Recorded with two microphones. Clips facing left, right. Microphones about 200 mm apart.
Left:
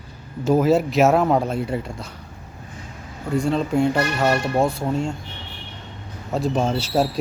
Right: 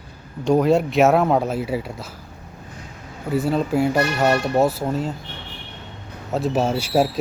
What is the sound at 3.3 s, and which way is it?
Speech, 5° right (ahead or behind).